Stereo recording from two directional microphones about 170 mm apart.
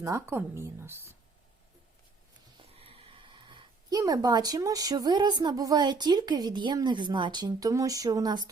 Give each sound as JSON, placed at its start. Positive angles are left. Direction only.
{"t": 0.0, "sound": "speech", "side_deg": -15}
{"t": 2.6, "sound": "speech", "side_deg": -35}